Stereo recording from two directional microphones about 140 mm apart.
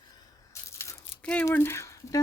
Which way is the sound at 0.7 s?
20° left (ahead or behind).